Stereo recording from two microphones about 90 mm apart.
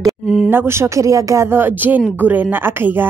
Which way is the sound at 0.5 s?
25° right (ahead or behind).